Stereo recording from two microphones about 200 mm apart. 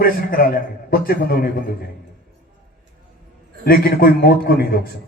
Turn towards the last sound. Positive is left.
turn(degrees=50)  # may be behind; listen again after turning